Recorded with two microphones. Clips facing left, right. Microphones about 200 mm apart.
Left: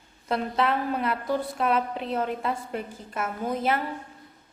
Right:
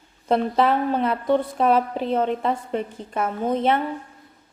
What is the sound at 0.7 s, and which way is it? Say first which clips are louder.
A woman's voice: right 5 dB; 30° right (ahead or behind).